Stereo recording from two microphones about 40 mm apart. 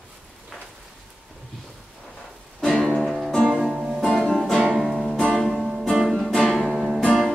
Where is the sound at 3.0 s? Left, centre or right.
Centre.